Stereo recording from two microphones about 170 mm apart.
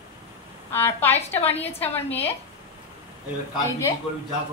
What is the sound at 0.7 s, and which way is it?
Speech, 15° left (ahead or behind).